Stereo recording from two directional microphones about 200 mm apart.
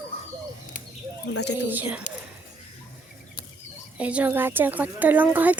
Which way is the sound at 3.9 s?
5° right (ahead or behind).